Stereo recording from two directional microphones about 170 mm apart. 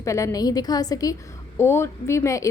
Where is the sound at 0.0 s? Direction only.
20° left (ahead or behind).